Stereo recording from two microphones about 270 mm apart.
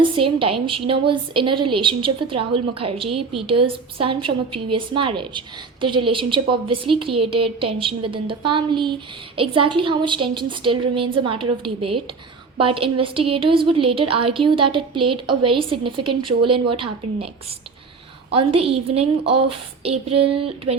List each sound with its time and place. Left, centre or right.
0.2 s a woman's voice: centre
18.3 s a woman's voice: right